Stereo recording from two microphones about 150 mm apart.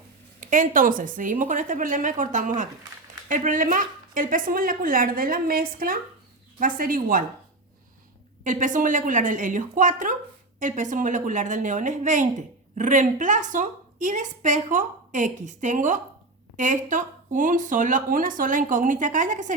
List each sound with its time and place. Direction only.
0.3 s a woman's voice: 60° right (ahead or behind)
8.4 s a woman's voice: 60° right (ahead or behind)